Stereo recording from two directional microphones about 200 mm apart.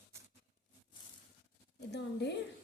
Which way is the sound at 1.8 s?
60° left (ahead or behind).